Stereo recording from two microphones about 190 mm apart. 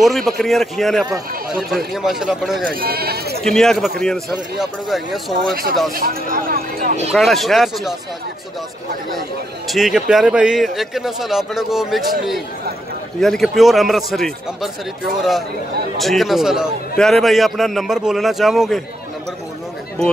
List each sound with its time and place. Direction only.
0.0 s speech: centre (ahead or behind)
2.7 s speech: 50° right (ahead or behind)
3.4 s speech: centre (ahead or behind)
5.9 s speech: 50° right (ahead or behind)
7.1 s speech: centre (ahead or behind)
9.7 s speech: centre (ahead or behind)
16.0 s speech: centre (ahead or behind)